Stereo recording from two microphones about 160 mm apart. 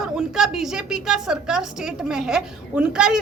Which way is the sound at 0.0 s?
5° right (ahead or behind).